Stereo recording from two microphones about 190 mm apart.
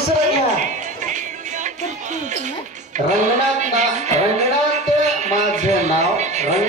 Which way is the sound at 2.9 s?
40° right (ahead or behind).